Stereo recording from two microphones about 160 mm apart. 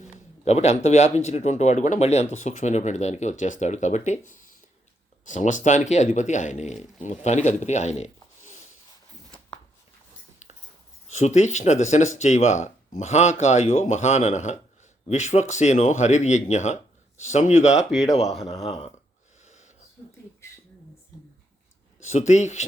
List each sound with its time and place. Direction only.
0.0 s speech: 45° left (ahead or behind)
4.3 s a sound: 55° left (ahead or behind)
5.2 s speech: 50° left (ahead or behind)
10.4 s dog: 45° left (ahead or behind)
11.1 s speech: 45° left (ahead or behind)
19.5 s wheeze: 50° left (ahead or behind)
22.1 s speech: 45° left (ahead or behind)